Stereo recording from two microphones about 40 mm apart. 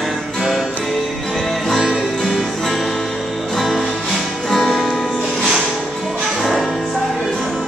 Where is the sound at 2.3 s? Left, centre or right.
Centre.